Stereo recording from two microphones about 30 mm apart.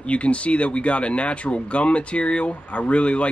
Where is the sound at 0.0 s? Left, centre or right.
Left.